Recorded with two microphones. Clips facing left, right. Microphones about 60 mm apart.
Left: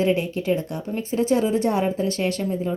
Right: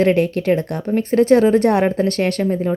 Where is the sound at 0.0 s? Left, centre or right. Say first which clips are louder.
Right 6 dB; right.